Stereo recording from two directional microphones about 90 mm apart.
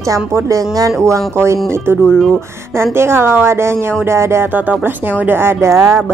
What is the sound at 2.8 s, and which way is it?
Speech, 30° right (ahead or behind).